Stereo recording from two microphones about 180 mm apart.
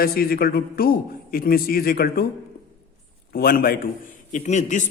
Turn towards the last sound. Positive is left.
turn(degrees=40)  # may be behind; listen again after turning